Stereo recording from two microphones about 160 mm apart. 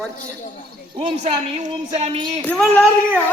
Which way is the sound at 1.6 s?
45° right (ahead or behind).